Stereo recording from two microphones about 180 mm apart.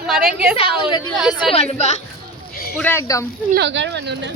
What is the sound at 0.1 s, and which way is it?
Speech, centre (ahead or behind).